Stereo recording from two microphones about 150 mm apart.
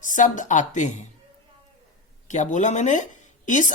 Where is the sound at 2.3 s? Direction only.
50° left (ahead or behind).